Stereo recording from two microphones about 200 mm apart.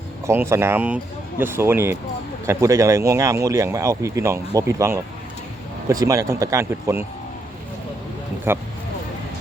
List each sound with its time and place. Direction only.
0.3 s speech: 15° right (ahead or behind)